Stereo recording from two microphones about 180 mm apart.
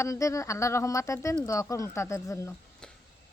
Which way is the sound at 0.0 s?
15° left (ahead or behind).